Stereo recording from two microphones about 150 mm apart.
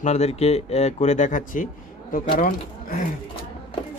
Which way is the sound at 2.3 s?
75° left (ahead or behind).